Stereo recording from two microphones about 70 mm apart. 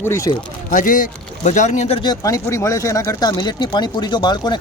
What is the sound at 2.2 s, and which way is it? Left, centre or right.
Speech, left.